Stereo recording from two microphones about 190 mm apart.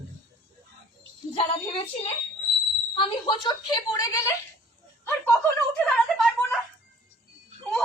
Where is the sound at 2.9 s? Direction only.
25° left (ahead or behind).